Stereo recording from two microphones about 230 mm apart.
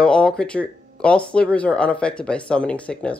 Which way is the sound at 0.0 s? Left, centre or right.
Centre.